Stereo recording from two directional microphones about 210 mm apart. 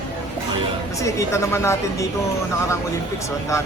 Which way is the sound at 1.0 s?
15° left (ahead or behind).